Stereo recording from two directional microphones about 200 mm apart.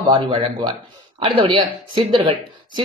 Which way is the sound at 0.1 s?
25° right (ahead or behind).